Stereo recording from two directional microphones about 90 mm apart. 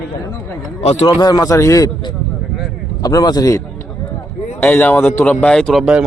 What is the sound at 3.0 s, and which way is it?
Speech, 45° left (ahead or behind).